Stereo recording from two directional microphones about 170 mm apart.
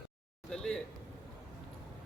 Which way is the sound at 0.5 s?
5° left (ahead or behind).